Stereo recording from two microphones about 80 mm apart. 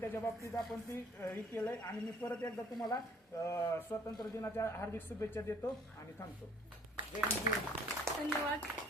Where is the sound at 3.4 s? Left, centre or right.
Left.